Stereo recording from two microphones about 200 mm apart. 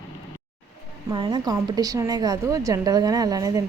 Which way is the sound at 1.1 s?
20° right (ahead or behind).